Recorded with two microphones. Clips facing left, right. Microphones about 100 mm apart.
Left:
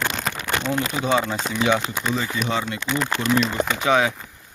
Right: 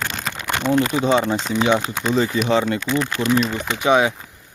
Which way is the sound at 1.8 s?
35° right (ahead or behind).